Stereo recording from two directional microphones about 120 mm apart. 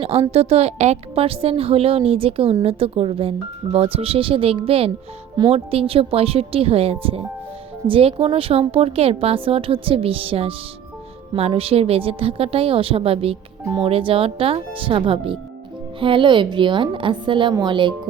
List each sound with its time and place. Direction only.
0.0 s a woman's voice: 55° right (ahead or behind)